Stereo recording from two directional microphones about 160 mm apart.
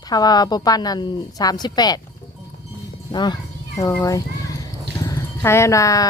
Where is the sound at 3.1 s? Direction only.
25° left (ahead or behind).